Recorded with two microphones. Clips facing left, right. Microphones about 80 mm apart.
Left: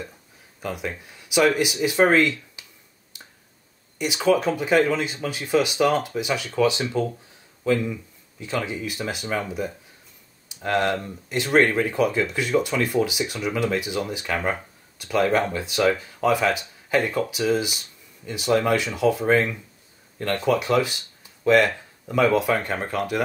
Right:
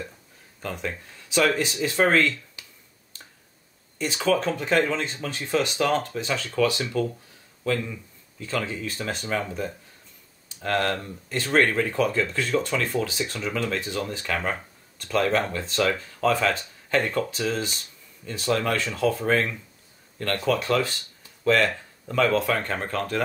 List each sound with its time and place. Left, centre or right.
0.6 s speech: centre
3.1 s tick-tock: centre
4.0 s speech: centre